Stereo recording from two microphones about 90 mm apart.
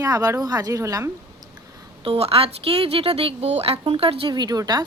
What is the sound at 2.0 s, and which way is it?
Speech, 90° right.